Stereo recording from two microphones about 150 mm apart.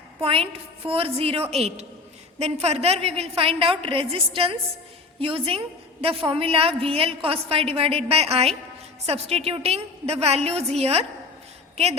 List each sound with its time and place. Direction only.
0.2 s a woman's voice: 40° right (ahead or behind)